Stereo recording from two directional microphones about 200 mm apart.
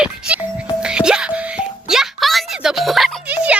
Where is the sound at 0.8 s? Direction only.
5° right (ahead or behind).